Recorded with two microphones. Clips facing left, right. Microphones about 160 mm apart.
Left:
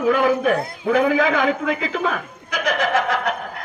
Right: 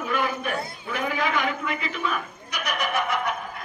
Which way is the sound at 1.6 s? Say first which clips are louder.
Left 7 dB; 80° left.